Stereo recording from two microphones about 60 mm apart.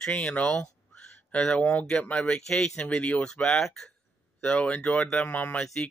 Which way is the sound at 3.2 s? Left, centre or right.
Centre.